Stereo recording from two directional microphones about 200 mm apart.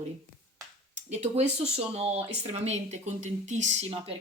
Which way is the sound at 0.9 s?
35° right (ahead or behind).